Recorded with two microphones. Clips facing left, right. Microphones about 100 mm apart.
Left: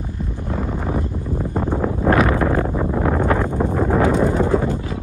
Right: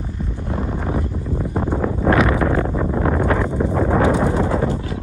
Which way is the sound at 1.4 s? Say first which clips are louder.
Even; 10° right (ahead or behind).